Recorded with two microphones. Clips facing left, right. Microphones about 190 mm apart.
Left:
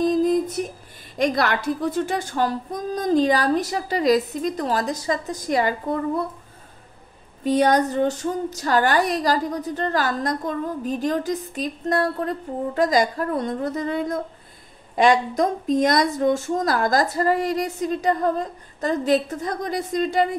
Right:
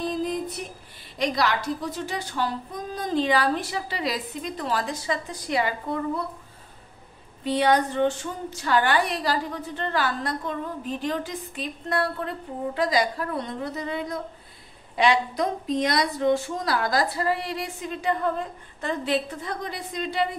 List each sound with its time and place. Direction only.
0.0 s a sound: 45° left (ahead or behind)
1.1 s a woman's voice: 50° left (ahead or behind)
7.4 s a woman's voice: 45° left (ahead or behind)